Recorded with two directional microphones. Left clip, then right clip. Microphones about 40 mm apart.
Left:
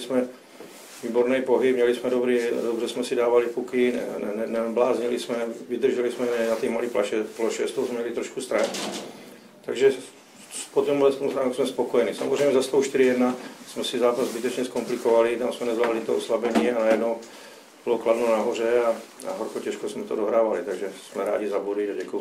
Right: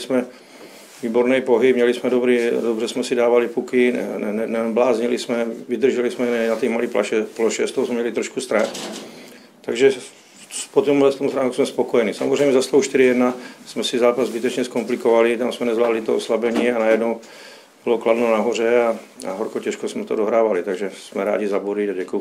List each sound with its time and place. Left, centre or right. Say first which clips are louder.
0.1 s a man's voice: right 3 dB; right
9.7 s a man's voice: right 4 dB; right